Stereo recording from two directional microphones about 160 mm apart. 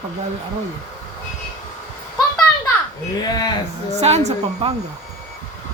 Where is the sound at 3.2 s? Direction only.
25° left (ahead or behind).